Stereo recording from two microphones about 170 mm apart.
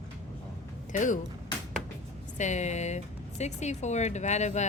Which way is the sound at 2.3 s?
45° left (ahead or behind).